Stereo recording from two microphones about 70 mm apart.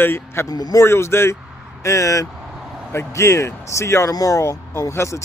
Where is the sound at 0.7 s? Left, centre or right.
Left.